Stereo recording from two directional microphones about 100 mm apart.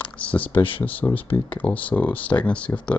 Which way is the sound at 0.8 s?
15° left (ahead or behind).